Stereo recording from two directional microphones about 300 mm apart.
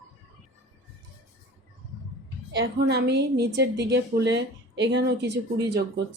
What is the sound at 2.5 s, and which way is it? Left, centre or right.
A woman's voice, right.